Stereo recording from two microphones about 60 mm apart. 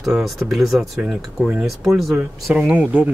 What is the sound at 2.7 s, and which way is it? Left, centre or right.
Speech, right.